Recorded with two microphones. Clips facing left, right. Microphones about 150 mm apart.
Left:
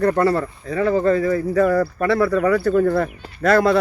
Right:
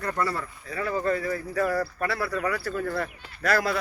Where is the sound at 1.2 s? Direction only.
50° left (ahead or behind).